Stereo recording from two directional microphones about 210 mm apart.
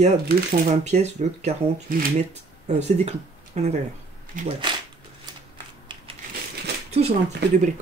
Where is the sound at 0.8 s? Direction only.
35° right (ahead or behind).